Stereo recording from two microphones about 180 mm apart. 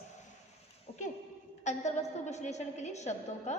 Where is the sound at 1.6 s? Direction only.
40° left (ahead or behind).